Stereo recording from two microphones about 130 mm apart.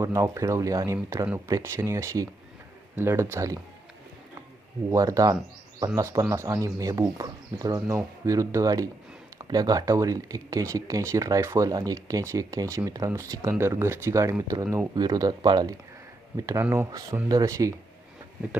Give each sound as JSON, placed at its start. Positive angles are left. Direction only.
{"t": 0.0, "sound": "speech", "side_deg": -25}
{"t": 4.9, "sound": "speech", "side_deg": -25}
{"t": 16.5, "sound": "speech", "side_deg": -20}